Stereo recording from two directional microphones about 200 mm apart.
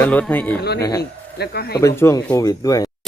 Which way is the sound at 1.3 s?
55° left (ahead or behind).